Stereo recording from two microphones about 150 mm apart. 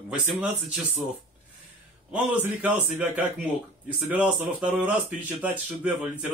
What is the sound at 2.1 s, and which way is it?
A man's voice, 10° right (ahead or behind).